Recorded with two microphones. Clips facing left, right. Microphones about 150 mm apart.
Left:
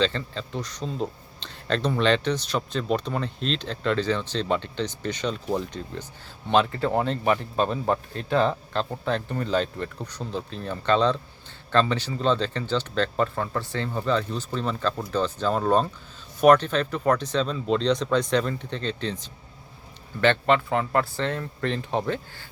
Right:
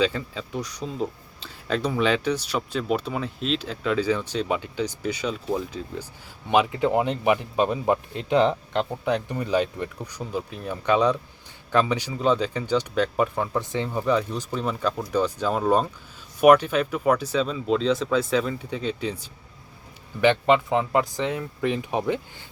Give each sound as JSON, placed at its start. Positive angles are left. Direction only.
{"t": 0.0, "sound": "speech", "side_deg": -10}